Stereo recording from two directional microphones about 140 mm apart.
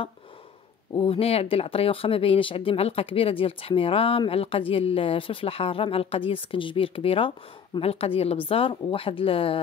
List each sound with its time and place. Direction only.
0.9 s speech: 40° left (ahead or behind)